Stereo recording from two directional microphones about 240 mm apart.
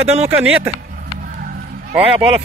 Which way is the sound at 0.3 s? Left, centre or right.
Centre.